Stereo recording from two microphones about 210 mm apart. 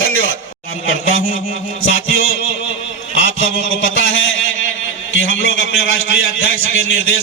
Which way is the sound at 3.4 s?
65° left (ahead or behind).